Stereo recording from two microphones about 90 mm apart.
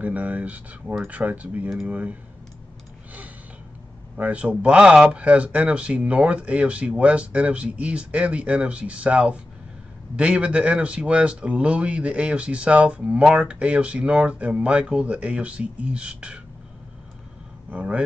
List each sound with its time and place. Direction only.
0.0 s speech: 20° right (ahead or behind)
4.2 s speech: 15° right (ahead or behind)
17.6 s speech: 15° right (ahead or behind)